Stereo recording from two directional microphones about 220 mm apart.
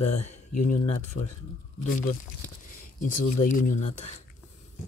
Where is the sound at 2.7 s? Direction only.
40° left (ahead or behind).